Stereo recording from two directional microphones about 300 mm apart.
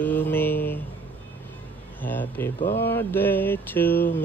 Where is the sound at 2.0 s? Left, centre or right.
Centre.